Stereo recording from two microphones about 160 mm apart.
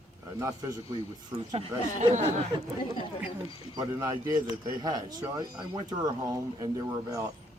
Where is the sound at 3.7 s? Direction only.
20° right (ahead or behind).